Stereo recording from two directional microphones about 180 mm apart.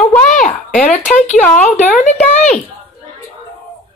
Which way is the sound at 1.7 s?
40° left (ahead or behind).